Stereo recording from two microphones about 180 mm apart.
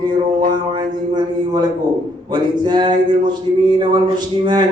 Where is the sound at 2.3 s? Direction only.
25° right (ahead or behind).